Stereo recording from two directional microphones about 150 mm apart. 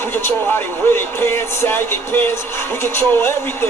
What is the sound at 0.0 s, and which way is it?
Speech, 15° left (ahead or behind).